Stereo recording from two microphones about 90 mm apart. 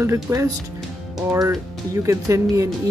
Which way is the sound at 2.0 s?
35° right (ahead or behind).